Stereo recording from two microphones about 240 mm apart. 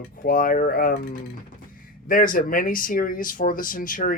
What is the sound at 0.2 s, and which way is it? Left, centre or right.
Speech, left.